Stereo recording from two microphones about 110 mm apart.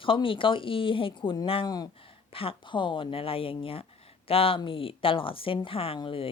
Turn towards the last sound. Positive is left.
turn(degrees=55)  # may be behind; listen again after turning